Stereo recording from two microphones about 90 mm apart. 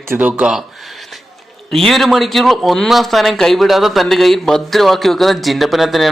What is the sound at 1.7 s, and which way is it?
Speech, 5° left (ahead or behind).